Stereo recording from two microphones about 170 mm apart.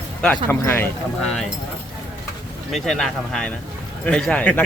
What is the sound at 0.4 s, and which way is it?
Speech, 15° left (ahead or behind).